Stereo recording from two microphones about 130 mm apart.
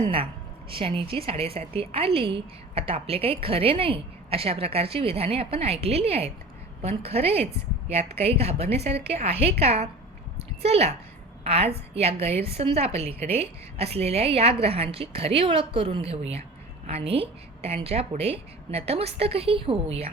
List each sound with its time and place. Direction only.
0.0 s a woman's voice: 45° right (ahead or behind)
10.3 s a sound: 50° right (ahead or behind)
11.4 s a woman's voice: 50° right (ahead or behind)